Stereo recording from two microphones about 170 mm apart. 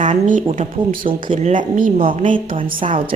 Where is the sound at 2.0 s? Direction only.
30° right (ahead or behind).